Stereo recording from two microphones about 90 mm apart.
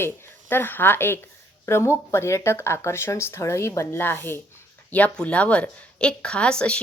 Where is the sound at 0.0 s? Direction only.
25° left (ahead or behind).